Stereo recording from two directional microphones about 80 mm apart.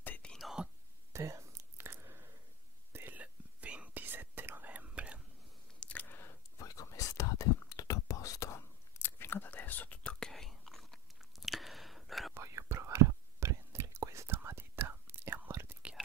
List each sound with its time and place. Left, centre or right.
0.0 s whispering: left
0.4 s whispering: centre
1.1 s a sound: right
2.9 s whispering: right
5.8 s biting: centre
6.6 s whispering: left
10.2 s chewing: centre
12.4 s whispering: right